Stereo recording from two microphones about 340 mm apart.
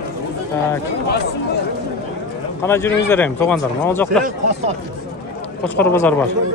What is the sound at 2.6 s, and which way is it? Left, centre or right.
Speech, centre.